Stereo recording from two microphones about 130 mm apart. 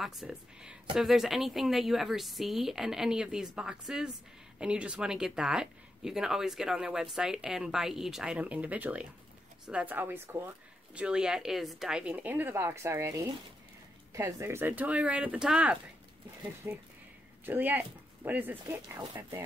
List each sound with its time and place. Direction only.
0.0 s speech: centre (ahead or behind)
16.6 s speech: 20° right (ahead or behind)